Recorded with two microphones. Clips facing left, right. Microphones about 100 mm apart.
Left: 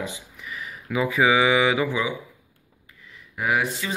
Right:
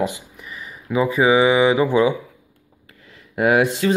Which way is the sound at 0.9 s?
35° right (ahead or behind).